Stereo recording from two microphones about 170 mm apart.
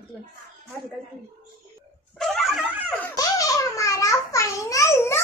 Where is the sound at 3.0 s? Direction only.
20° left (ahead or behind).